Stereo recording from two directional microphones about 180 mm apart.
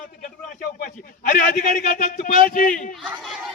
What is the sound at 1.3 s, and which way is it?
A man's voice, 55° left (ahead or behind).